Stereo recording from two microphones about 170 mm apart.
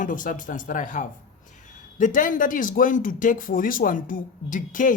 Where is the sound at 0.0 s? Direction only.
50° left (ahead or behind).